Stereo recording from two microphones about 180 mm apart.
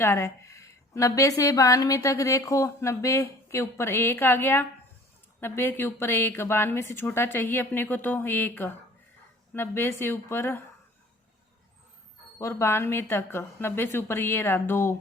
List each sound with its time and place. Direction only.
0.0 s a woman's voice: 15° left (ahead or behind)
12.4 s a woman's voice: 15° left (ahead or behind)